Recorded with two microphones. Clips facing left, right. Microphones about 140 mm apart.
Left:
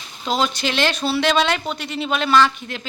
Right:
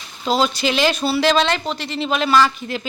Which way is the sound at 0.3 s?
5° right (ahead or behind).